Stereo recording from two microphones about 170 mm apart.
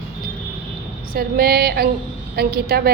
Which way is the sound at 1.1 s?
60° right (ahead or behind).